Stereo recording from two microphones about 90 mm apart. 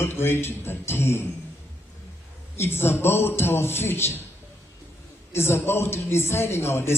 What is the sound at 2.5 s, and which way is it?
A man's voice, 25° left (ahead or behind).